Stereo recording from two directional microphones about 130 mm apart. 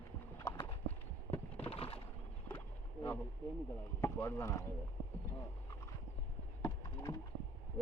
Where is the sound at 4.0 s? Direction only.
20° left (ahead or behind).